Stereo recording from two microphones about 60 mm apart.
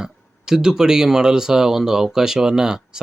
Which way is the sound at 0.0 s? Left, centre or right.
Centre.